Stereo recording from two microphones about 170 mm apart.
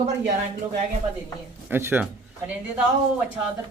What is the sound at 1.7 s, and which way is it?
A woman's voice, 10° right (ahead or behind).